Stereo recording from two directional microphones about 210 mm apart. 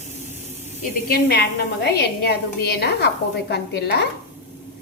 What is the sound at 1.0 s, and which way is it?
A woman's voice, 50° left (ahead or behind).